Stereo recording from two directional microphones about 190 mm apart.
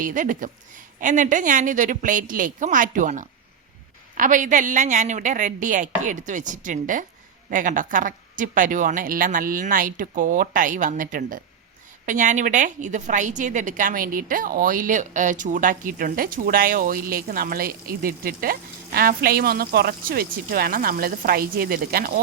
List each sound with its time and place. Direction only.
0.0 s a woman's voice: 40° right (ahead or behind)